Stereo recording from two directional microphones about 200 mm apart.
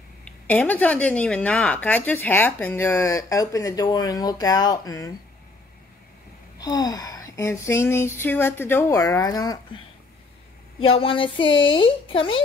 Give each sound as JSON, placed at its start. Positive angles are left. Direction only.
{"t": 0.2, "sound": "speech", "side_deg": 10}
{"t": 6.6, "sound": "speech", "side_deg": 20}
{"t": 10.8, "sound": "speech", "side_deg": 30}